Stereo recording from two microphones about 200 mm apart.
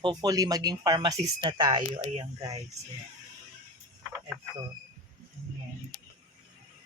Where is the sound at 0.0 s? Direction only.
20° right (ahead or behind).